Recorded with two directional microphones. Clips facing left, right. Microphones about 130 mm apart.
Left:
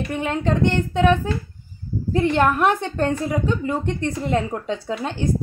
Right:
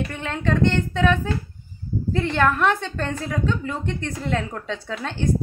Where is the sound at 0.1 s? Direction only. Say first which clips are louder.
Left 2 dB; 15° left (ahead or behind).